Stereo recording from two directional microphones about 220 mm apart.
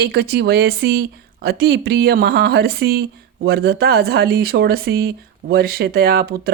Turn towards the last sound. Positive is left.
turn(degrees=-45)  # may be behind; listen again after turning